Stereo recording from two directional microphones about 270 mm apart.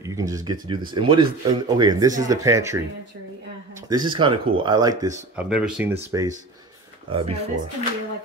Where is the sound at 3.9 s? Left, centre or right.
Centre.